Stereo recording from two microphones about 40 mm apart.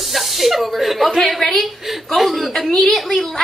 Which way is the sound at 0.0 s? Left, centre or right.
Centre.